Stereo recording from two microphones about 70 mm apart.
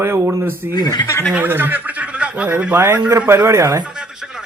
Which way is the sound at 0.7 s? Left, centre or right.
Left.